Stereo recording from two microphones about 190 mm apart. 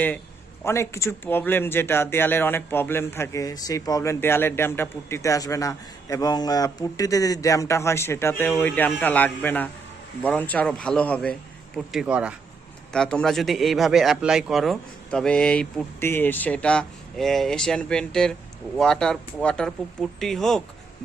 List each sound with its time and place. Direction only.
0.6 s speech: 15° left (ahead or behind)
11.9 s speech: 5° right (ahead or behind)